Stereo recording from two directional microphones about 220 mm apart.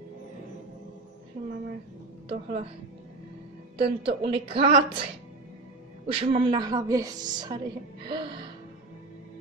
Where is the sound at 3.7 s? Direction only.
25° right (ahead or behind).